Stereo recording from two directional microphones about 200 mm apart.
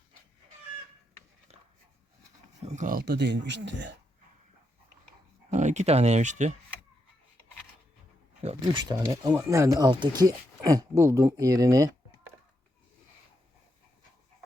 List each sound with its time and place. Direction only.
2.6 s speech: 40° right (ahead or behind); by 3.9 s 65° right (ahead or behind)
5.5 s speech: 35° right (ahead or behind)
8.4 s speech: 30° right (ahead or behind)
8.8 s speech: 20° right (ahead or behind)